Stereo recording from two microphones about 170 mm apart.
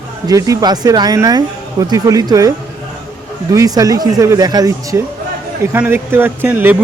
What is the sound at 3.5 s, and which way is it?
A man's voice, 20° right (ahead or behind).